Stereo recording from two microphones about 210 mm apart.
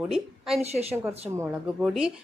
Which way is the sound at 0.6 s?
30° right (ahead or behind).